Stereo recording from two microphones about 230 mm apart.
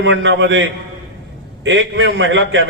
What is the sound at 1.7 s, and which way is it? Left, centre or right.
A man's voice, right.